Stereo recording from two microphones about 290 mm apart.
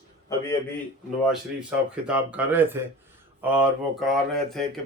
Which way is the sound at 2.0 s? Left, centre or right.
Centre.